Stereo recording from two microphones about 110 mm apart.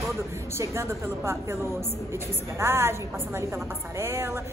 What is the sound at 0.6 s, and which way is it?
A woman's voice, 25° right (ahead or behind).